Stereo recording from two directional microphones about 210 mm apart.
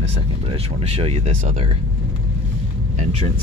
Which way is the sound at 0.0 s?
30° right (ahead or behind).